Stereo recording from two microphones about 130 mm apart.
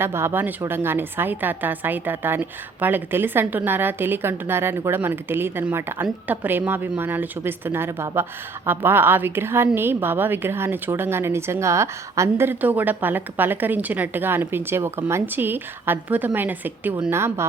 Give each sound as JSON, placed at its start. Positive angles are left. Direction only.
{"t": 0.0, "sound": "a woman's voice", "side_deg": -20}